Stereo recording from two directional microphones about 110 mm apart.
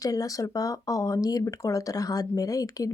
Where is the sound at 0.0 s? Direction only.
30° left (ahead or behind).